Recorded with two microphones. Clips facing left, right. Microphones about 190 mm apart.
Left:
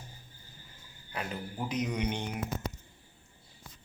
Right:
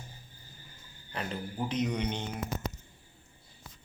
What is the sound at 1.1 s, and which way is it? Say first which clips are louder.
A man's voice: right 1 dB; 5° left (ahead or behind).